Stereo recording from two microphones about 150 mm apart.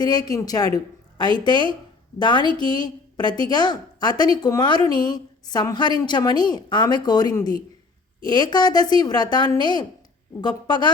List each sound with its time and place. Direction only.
0.0 s a woman's voice: 25° left (ahead or behind)